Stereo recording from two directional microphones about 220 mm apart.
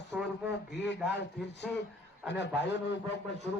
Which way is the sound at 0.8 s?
50° left (ahead or behind).